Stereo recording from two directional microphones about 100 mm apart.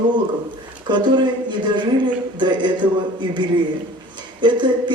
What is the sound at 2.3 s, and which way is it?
Speech, 50° right (ahead or behind).